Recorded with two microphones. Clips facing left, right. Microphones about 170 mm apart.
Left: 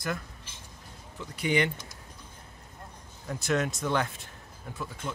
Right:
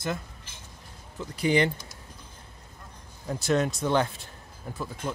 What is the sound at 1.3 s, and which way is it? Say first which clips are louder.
Speech: right 4 dB; 35° right (ahead or behind).